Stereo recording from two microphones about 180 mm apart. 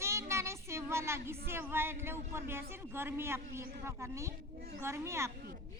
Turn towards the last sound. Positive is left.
turn(degrees=-15)  # may be behind; listen again after turning